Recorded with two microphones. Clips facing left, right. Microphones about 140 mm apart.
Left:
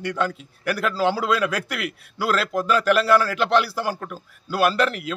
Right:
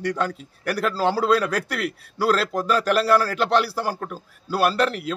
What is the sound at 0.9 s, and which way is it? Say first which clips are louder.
Speech: left 1 dB; centre (ahead or behind).